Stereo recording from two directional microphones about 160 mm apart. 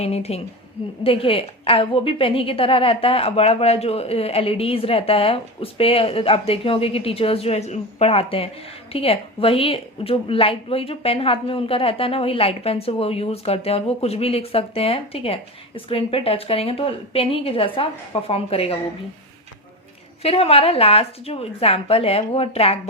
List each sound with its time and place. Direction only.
0.0 s a woman's voice: 40° left (ahead or behind)
20.2 s a woman's voice: 40° left (ahead or behind)